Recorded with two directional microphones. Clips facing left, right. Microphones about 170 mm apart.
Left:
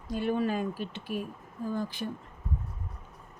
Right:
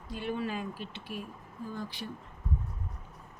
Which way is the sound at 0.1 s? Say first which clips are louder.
Left 6 dB; 45° left (ahead or behind).